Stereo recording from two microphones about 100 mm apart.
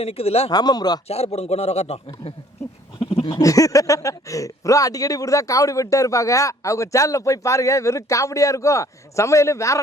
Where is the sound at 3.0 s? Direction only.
60° left (ahead or behind).